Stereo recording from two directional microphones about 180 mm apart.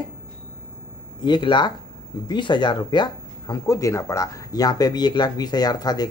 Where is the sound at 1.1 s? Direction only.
25° left (ahead or behind).